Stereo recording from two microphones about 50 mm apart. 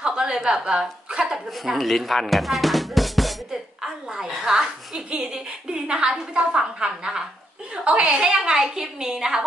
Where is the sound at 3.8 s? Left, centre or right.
Centre.